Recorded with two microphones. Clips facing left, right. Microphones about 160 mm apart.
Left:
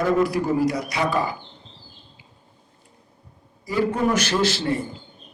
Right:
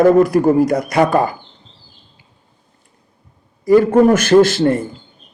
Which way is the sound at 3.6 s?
50° right (ahead or behind).